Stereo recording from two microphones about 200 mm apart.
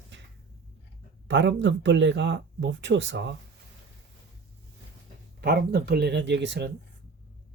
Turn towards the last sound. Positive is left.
turn(degrees=-60)  # may be behind; listen again after turning